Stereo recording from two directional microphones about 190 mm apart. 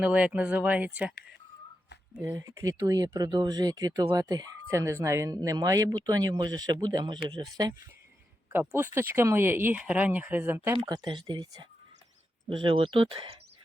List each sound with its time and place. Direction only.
0.0 s speech: 5° right (ahead or behind)
2.1 s speech: 15° right (ahead or behind)
10.8 s speech: 20° right (ahead or behind)